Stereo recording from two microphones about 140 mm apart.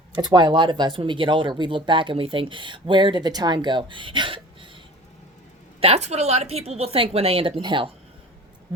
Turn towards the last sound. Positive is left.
turn(degrees=-35)  # may be behind; listen again after turning